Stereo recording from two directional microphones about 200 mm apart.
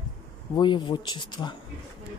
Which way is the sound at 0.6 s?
20° left (ahead or behind).